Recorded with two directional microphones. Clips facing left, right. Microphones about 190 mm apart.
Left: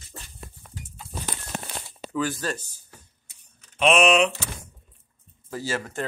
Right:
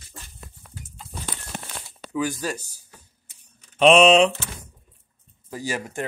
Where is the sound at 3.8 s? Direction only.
30° right (ahead or behind).